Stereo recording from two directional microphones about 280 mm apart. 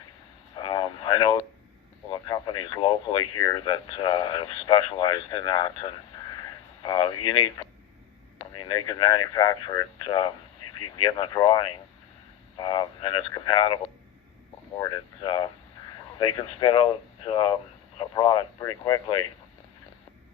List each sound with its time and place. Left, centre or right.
0.5 s radio: centre
3.4 s speech: centre
6.3 s radio: centre
7.3 s speech: centre
8.6 s speech: centre
14.8 s speech: centre